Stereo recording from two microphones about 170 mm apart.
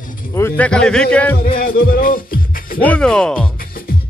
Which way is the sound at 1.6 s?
60° left (ahead or behind).